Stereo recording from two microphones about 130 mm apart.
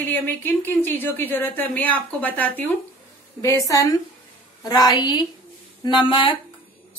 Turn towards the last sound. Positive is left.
turn(degrees=40)  # may be behind; listen again after turning